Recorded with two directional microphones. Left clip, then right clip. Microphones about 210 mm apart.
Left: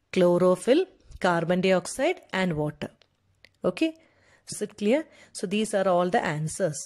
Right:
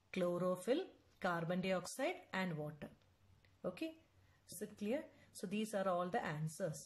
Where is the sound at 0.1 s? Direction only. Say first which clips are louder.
Left 18 dB; 40° left (ahead or behind).